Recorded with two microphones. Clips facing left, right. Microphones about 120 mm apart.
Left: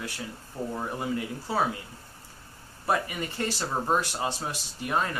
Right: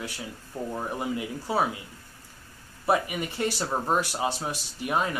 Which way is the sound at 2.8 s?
15° right (ahead or behind).